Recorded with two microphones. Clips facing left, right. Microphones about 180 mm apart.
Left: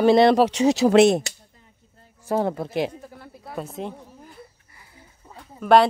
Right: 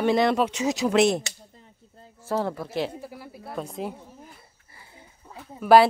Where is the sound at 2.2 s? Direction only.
20° left (ahead or behind).